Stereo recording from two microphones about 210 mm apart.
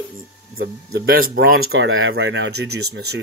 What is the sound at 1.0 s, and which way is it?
Speech, 45° right (ahead or behind).